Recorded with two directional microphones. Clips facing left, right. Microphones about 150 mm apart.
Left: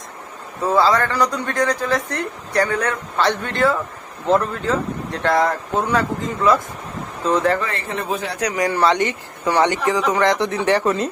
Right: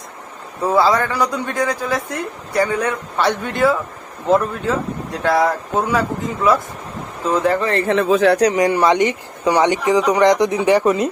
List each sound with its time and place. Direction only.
0.6 s a man's voice: 15° right (ahead or behind)
7.9 s speech: 90° right
8.4 s a man's voice: 25° right (ahead or behind)